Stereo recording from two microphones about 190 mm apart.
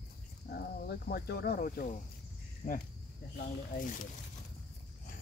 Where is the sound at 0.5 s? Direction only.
55° left (ahead or behind).